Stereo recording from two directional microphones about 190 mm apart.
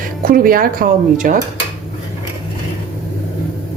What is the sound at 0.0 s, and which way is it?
A woman's voice, 45° right (ahead or behind).